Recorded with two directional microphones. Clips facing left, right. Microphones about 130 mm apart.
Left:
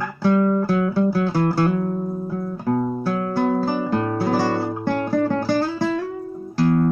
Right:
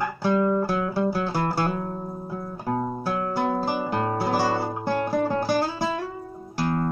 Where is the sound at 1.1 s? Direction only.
20° right (ahead or behind).